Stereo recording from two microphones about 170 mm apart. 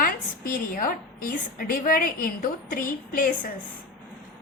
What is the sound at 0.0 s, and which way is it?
A woman's voice, 55° left (ahead or behind).